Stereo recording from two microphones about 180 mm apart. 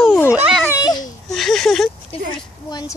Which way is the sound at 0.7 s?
20° left (ahead or behind).